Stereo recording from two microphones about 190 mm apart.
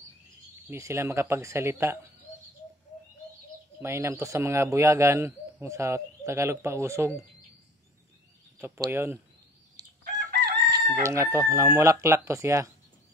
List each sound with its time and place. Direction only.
0.7 s speech: 15° right (ahead or behind)
3.8 s speech: 15° right (ahead or behind)
8.5 s speech: 15° right (ahead or behind)
10.1 s chicken: 50° right (ahead or behind)
11.0 s speech: 15° right (ahead or behind)